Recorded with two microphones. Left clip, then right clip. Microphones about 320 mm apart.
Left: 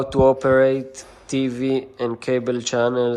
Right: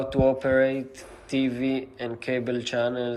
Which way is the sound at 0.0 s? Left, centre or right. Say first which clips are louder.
Left 6 dB; centre.